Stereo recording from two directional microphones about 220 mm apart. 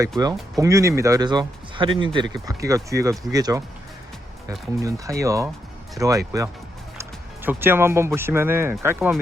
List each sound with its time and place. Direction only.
0.5 s speech: 15° right (ahead or behind)
4.8 s speech: 15° right (ahead or behind)